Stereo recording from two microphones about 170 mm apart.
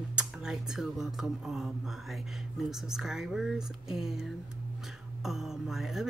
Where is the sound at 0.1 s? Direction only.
5° right (ahead or behind).